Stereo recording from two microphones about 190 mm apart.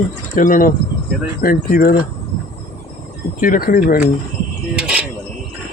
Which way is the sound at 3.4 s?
45° left (ahead or behind).